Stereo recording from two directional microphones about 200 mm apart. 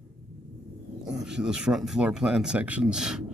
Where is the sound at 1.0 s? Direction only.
5° right (ahead or behind).